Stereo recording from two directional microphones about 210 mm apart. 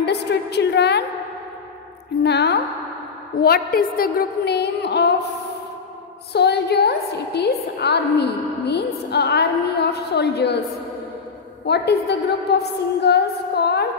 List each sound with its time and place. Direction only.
0.0 s a woman's voice: 50° left (ahead or behind)
2.2 s a woman's voice: 50° left (ahead or behind)
6.3 s a woman's voice: 50° left (ahead or behind)
11.6 s a woman's voice: 50° left (ahead or behind)